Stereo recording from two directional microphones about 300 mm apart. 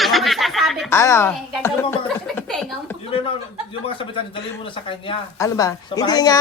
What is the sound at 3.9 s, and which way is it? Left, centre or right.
Speech, centre.